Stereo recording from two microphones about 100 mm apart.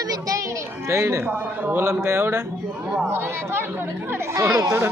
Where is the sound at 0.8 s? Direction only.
30° right (ahead or behind).